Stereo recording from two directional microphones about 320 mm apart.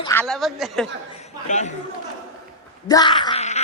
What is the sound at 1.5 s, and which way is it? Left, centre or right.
Speech, left.